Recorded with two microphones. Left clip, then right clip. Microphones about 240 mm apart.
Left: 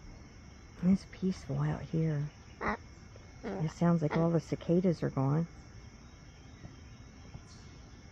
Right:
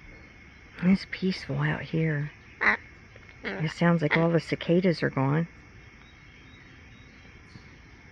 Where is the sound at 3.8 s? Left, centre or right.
Right.